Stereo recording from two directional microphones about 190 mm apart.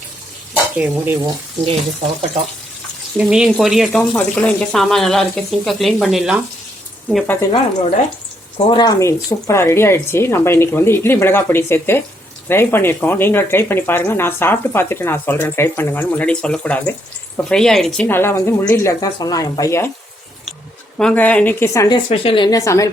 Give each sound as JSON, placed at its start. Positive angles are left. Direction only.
{"t": 0.8, "sound": "speech", "side_deg": -10}
{"t": 3.2, "sound": "speech", "side_deg": -5}
{"t": 7.5, "sound": "speech", "side_deg": 35}
{"t": 21.0, "sound": "speech", "side_deg": 5}